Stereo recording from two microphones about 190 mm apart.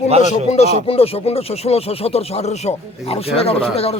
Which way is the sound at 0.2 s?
35° left (ahead or behind).